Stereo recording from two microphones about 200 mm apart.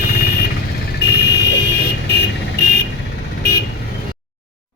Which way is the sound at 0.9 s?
55° left (ahead or behind).